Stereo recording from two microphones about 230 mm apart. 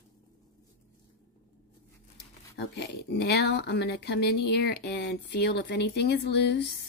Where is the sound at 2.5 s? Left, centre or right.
Left.